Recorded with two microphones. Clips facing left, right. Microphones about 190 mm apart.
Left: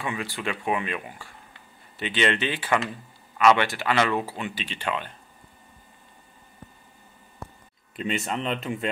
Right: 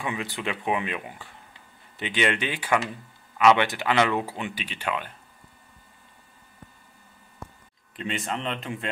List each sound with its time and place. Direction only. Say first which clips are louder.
0.0 s speech: even; 20° right (ahead or behind)
7.9 s speech: left 2 dB; centre (ahead or behind)